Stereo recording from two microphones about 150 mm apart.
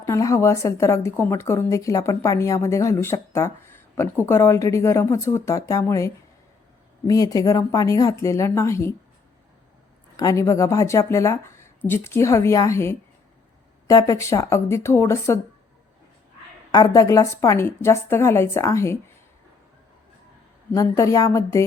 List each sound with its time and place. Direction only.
0.0 s a woman's voice: 20° left (ahead or behind)
10.2 s a woman's voice: 20° left (ahead or behind)
16.7 s a woman's voice: 25° left (ahead or behind)
20.7 s a woman's voice: 20° left (ahead or behind)